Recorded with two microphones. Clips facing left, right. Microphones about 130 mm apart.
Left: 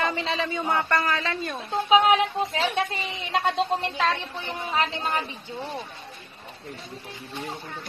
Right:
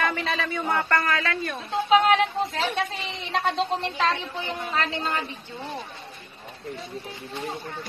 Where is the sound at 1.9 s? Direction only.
5° left (ahead or behind).